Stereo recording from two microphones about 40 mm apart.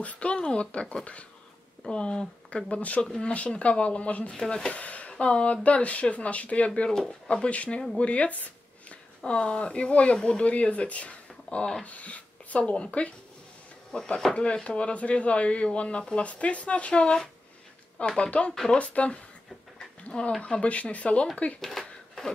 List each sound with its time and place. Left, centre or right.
0.0 s speech: left
4.3 s speech: centre
6.9 s speech: centre
7.4 s speech: left
8.0 s a sound: left
9.2 s speech: left
18.8 s speech: left
20.1 s speech: left
20.6 s speech: left
21.5 s a sound: centre